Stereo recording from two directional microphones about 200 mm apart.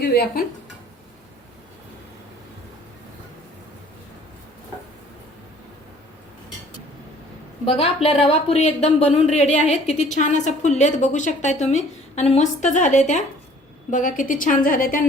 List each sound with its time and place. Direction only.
0.0 s a woman's voice: 50° left (ahead or behind)
7.6 s a woman's voice: 30° left (ahead or behind)